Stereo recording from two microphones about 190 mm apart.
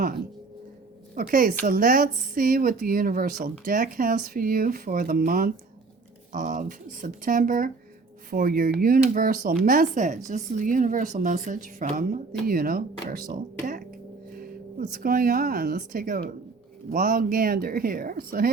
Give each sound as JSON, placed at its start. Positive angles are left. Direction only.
{"t": 1.1, "sound": "a woman's voice", "side_deg": -45}